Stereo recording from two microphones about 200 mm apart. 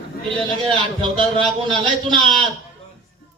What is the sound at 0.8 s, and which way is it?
Speech, 25° right (ahead or behind).